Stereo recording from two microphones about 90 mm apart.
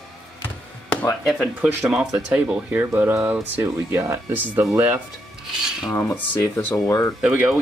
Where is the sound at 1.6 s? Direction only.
15° right (ahead or behind).